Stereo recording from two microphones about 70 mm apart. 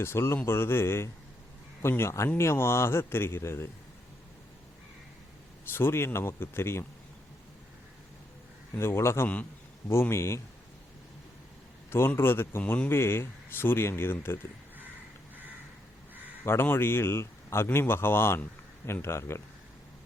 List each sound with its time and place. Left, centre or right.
0.0 s speech: left
5.7 s speech: left
8.7 s speech: left
9.2 s a man's voice: left
9.9 s speech: left
11.9 s speech: left
16.4 s a man's voice: left